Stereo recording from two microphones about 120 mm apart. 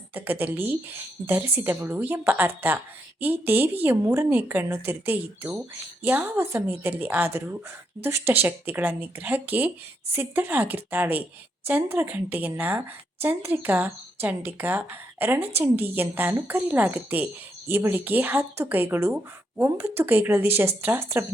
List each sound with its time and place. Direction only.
0.1 s speech: 15° right (ahead or behind)